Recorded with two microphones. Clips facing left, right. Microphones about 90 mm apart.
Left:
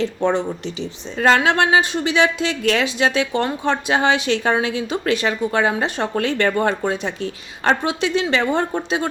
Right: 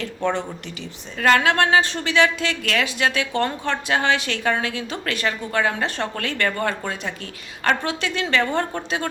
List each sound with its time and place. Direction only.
0.0 s speech: 20° left (ahead or behind)